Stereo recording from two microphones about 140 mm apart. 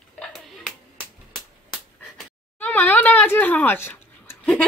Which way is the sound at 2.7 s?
15° left (ahead or behind).